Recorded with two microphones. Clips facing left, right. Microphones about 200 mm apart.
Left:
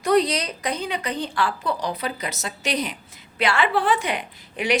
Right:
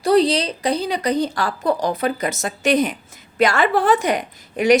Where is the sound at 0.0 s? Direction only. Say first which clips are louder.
Right 4 dB; 30° right (ahead or behind).